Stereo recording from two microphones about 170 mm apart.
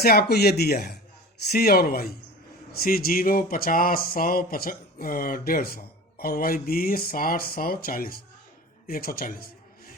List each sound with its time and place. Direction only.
0.0 s speech: 65° left (ahead or behind)